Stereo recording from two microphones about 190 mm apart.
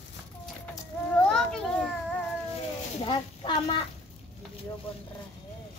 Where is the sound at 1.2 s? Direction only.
5° left (ahead or behind).